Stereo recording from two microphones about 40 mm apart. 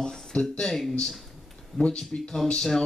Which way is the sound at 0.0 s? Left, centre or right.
Left.